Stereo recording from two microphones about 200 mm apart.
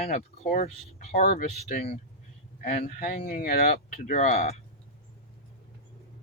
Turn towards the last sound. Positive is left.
turn(degrees=40)  # may be behind; listen again after turning